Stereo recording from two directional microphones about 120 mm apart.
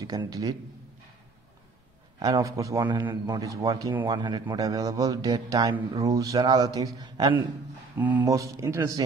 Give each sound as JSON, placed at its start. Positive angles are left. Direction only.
{"t": 0.0, "sound": "a man's voice", "side_deg": -30}
{"t": 2.1, "sound": "speech", "side_deg": -35}
{"t": 2.8, "sound": "a man's voice", "side_deg": -40}
{"t": 4.1, "sound": "a man's voice", "side_deg": -40}
{"t": 4.6, "sound": "speech", "side_deg": -25}
{"t": 8.0, "sound": "speech", "side_deg": -15}
{"t": 8.3, "sound": "speech", "side_deg": -25}